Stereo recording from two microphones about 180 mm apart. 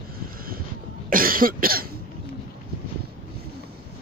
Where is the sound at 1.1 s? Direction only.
50° right (ahead or behind).